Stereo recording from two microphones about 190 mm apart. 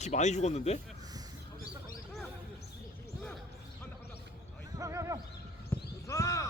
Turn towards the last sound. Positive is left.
turn(degrees=15)  # may be behind; listen again after turning